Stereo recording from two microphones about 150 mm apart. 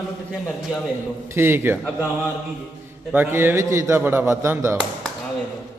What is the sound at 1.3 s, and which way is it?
Speech, 15° right (ahead or behind).